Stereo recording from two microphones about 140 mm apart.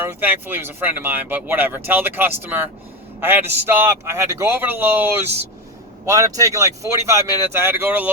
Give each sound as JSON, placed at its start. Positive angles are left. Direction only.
{"t": 0.0, "sound": "speech", "side_deg": -15}
{"t": 6.1, "sound": "speech", "side_deg": -25}